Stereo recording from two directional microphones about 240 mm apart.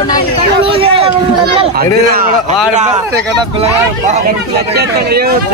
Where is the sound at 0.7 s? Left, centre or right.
Right.